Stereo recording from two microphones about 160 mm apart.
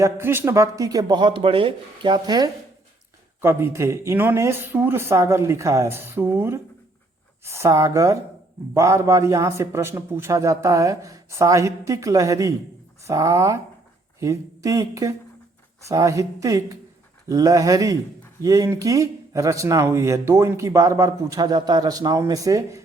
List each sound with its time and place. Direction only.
0.0 s speech: 15° right (ahead or behind)
3.4 s speech: 15° right (ahead or behind)